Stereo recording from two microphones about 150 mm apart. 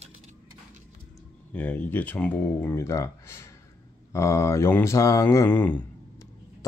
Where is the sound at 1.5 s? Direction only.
10° left (ahead or behind).